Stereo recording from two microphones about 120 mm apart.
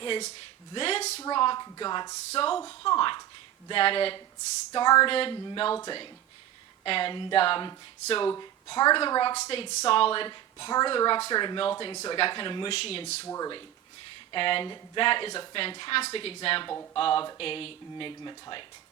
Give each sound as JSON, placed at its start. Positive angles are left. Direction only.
{"t": 0.7, "sound": "speech", "side_deg": 55}
{"t": 1.2, "sound": "a woman's voice", "side_deg": 40}
{"t": 2.3, "sound": "a woman's voice", "side_deg": 50}
{"t": 4.7, "sound": "a woman's voice", "side_deg": 40}
{"t": 8.3, "sound": "a woman's voice", "side_deg": 35}
{"t": 9.3, "sound": "a woman's voice", "side_deg": 60}
{"t": 13.2, "sound": "speech", "side_deg": 25}
{"t": 14.3, "sound": "a woman's voice", "side_deg": 45}